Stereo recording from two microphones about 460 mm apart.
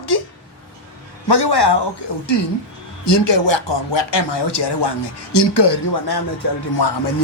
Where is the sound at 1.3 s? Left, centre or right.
Left.